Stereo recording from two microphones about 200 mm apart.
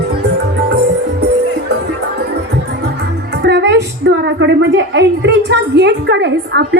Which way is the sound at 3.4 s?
60° right (ahead or behind).